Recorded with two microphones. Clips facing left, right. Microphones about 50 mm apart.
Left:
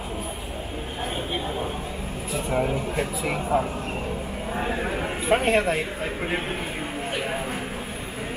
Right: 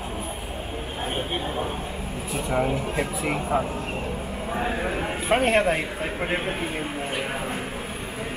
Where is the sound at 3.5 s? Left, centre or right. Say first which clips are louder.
Left 2 dB; centre.